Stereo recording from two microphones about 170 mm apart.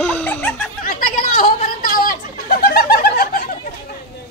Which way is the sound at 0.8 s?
50° left (ahead or behind).